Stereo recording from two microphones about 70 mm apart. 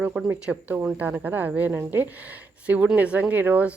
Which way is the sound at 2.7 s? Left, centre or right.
Centre.